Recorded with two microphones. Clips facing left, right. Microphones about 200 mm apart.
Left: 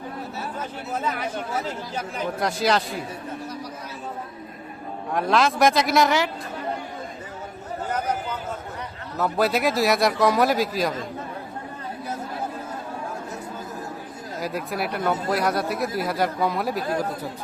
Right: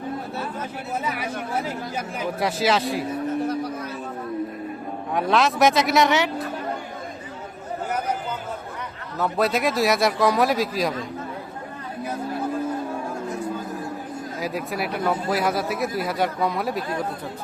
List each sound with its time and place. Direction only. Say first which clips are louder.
0.9 s speech: left 1 dB; 10° right (ahead or behind)
3.4 s a sound: right 9 dB; 55° right (ahead or behind)
5.1 s speech: even; centre (ahead or behind)
9.1 s speech: even; centre (ahead or behind)
14.4 s speech: even; centre (ahead or behind)